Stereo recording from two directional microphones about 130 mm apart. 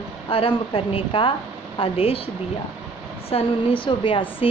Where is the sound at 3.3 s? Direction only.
45° left (ahead or behind).